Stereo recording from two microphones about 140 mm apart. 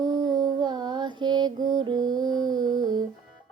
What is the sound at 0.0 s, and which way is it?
Music, 30° right (ahead or behind).